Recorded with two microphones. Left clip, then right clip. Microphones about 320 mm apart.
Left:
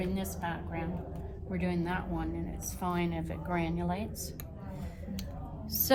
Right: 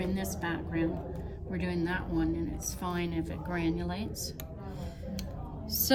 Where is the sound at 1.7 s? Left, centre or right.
Centre.